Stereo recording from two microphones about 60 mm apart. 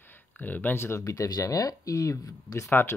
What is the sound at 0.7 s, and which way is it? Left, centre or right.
Speech, left.